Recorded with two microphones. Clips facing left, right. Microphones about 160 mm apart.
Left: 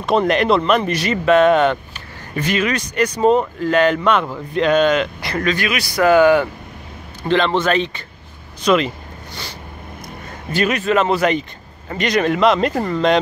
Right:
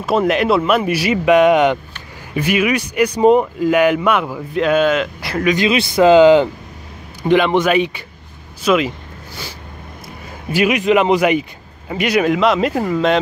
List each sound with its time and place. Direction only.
0.0 s speech: 5° right (ahead or behind)
5.7 s speech: 25° right (ahead or behind); by 8.9 s 5° right (ahead or behind)
10.5 s speech: 10° right (ahead or behind)